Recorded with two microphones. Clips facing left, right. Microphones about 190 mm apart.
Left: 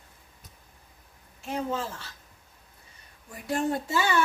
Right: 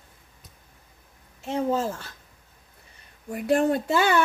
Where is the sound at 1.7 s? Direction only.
45° right (ahead or behind).